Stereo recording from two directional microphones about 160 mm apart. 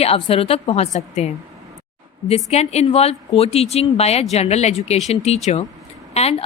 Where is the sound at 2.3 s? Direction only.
40° left (ahead or behind).